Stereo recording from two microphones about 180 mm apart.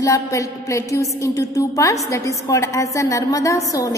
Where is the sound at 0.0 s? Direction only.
20° left (ahead or behind).